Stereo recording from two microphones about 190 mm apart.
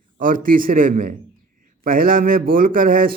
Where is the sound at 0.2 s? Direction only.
45° right (ahead or behind).